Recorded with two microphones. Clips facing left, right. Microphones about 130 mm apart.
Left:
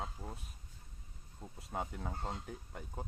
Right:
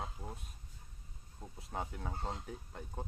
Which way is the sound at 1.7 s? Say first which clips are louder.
Left 1 dB; centre (ahead or behind).